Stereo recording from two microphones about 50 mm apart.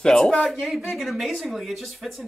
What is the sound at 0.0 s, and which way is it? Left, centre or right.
Speech, centre.